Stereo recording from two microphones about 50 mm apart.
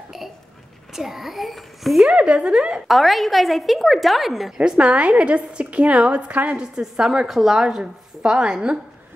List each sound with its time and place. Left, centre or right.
0.9 s a woman's voice: centre
2.0 s a woman's voice: right
2.9 s a woman's voice: centre
4.6 s a woman's voice: right
6.6 s a woman's voice: centre